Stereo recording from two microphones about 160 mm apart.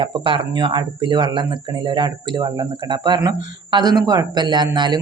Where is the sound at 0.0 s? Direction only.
35° right (ahead or behind).